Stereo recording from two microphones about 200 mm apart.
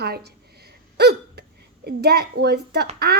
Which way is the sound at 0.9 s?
55° right (ahead or behind).